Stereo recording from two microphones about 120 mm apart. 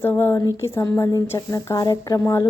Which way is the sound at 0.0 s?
20° left (ahead or behind).